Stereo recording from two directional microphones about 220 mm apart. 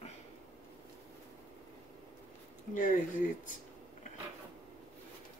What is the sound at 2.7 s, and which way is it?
Speech, 35° left (ahead or behind).